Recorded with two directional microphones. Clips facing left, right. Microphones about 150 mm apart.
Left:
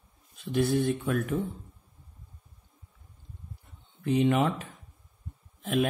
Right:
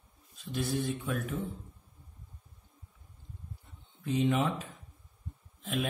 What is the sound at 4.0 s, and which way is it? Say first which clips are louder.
Speech: left 4 dB; 60° left (ahead or behind).